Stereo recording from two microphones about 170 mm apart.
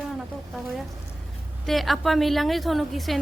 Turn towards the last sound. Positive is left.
turn(degrees=0)  # may be behind; listen again after turning